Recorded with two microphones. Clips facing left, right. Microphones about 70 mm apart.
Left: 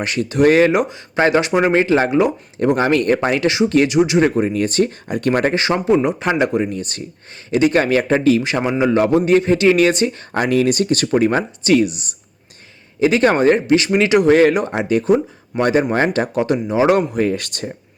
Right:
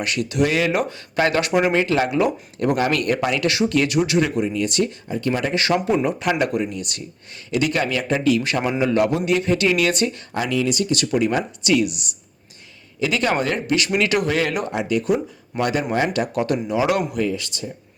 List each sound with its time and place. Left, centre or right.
0.0 s speech: left
0.7 s speech: left
4.2 s speech: left
5.0 s speech: left
5.5 s speech: left
10.3 s speech: left
17.2 s speech: left